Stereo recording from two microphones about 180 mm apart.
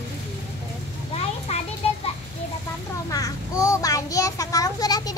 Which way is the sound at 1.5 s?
35° left (ahead or behind).